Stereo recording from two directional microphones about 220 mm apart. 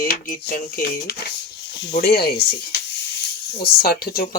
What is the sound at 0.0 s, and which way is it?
Speech, 40° left (ahead or behind).